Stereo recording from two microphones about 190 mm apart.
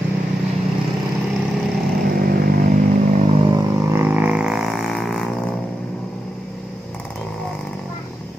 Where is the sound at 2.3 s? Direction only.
50° right (ahead or behind).